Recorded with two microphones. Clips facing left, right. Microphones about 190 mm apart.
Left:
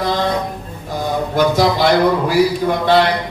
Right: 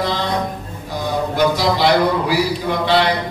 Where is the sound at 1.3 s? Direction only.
50° left (ahead or behind).